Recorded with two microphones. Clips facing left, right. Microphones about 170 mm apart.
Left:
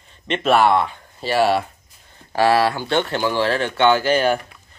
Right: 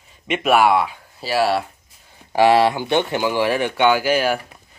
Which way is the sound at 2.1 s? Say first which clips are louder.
Right 2 dB; 15° right (ahead or behind).